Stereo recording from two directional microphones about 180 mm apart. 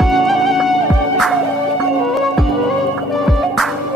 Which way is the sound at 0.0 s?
Centre (ahead or behind).